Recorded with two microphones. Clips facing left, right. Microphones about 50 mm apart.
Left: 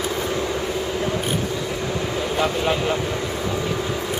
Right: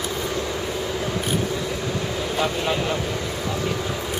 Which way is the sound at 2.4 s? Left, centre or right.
Centre.